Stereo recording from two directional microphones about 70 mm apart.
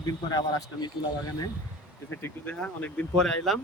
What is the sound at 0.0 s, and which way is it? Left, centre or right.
Speech, left.